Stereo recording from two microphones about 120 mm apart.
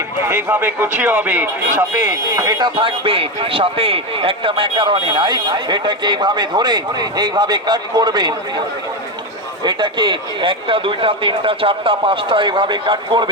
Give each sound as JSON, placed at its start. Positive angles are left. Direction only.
{"t": 0.2, "sound": "speech", "side_deg": -20}
{"t": 1.7, "sound": "speech", "side_deg": -30}
{"t": 9.6, "sound": "speech", "side_deg": -40}